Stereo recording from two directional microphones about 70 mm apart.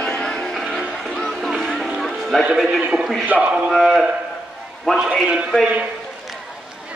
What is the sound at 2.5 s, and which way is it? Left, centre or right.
Speech, centre.